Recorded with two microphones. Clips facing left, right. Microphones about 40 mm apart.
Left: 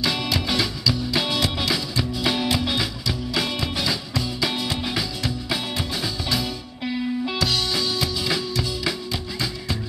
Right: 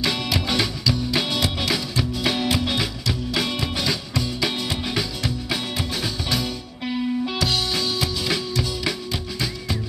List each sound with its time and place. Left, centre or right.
0.0 s music: centre